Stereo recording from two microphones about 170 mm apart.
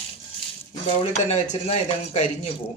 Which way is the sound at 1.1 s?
40° left (ahead or behind).